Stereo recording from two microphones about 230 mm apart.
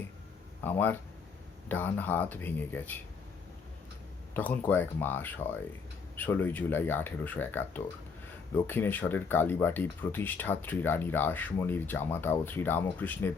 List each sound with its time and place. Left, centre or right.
0.6 s speech: centre
4.4 s speech: centre